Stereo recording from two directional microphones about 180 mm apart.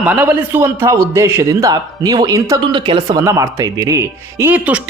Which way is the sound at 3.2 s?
15° right (ahead or behind).